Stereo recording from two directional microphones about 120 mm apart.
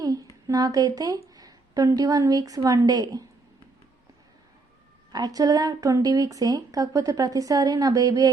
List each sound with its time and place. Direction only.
0.0 s a sound: 30° right (ahead or behind)
0.4 s a woman's voice: 30° right (ahead or behind)
5.1 s speech: 30° right (ahead or behind)